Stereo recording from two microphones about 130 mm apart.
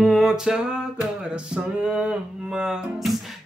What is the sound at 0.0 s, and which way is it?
Music, centre (ahead or behind).